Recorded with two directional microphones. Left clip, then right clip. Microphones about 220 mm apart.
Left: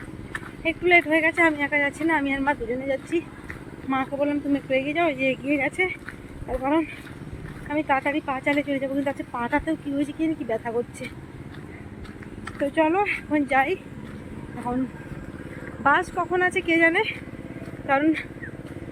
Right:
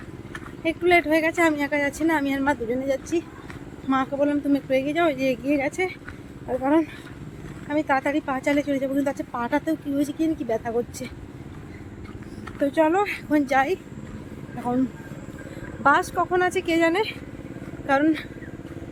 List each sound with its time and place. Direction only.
0.6 s a woman's voice: 15° right (ahead or behind)
12.7 s a woman's voice: 15° right (ahead or behind)
15.8 s a woman's voice: 15° right (ahead or behind)